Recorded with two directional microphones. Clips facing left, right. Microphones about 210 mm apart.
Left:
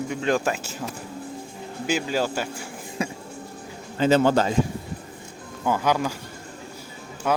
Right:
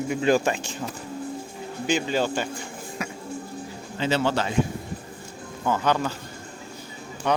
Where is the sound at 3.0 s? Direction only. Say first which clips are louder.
Left 6 dB; 30° left (ahead or behind).